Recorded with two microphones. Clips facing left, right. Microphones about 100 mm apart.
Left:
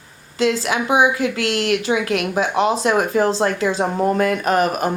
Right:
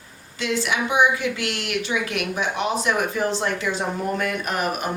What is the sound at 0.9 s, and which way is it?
Speech, 90° left.